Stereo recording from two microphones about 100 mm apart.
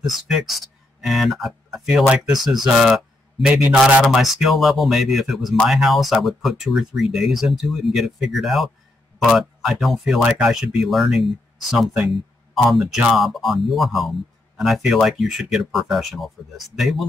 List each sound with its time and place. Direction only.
0.0 s speech: centre (ahead or behind)